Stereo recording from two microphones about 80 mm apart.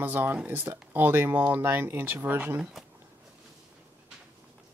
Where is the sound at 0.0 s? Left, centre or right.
Right.